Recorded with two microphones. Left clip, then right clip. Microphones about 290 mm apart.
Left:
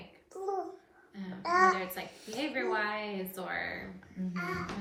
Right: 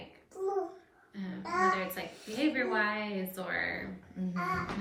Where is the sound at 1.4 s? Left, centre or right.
Centre.